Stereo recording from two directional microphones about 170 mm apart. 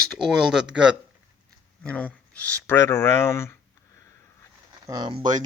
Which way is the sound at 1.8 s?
10° left (ahead or behind).